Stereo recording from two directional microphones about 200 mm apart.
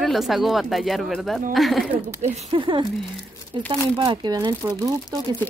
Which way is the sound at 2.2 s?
30° right (ahead or behind).